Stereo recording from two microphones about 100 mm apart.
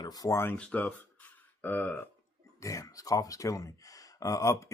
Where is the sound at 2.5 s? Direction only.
30° left (ahead or behind).